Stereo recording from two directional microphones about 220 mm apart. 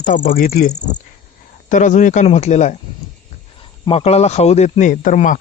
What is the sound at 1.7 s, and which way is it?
Speech, 35° left (ahead or behind).